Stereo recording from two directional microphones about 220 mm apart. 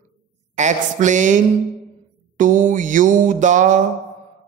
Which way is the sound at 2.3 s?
35° right (ahead or behind).